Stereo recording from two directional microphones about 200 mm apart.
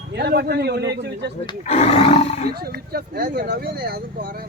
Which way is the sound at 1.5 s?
35° left (ahead or behind).